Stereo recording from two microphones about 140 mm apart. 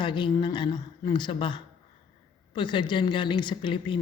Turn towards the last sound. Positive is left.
turn(degrees=35)  # may be behind; listen again after turning